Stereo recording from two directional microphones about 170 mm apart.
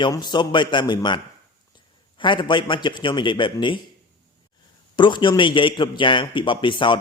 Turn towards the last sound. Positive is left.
turn(degrees=30)  # may be behind; listen again after turning